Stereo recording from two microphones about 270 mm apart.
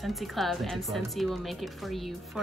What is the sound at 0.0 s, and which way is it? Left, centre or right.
Speech, centre.